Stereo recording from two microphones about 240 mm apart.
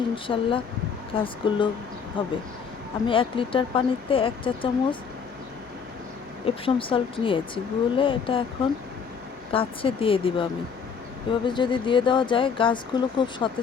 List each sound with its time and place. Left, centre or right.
0.3 s speech: left
6.4 s speech: left
9.5 s speech: left